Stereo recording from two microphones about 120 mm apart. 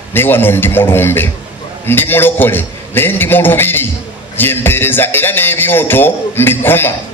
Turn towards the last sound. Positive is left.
turn(degrees=15)  # may be behind; listen again after turning